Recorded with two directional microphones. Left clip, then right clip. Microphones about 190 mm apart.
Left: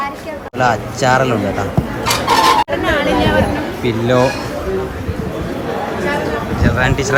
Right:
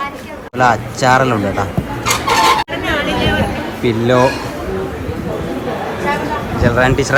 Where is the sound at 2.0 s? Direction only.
Centre (ahead or behind).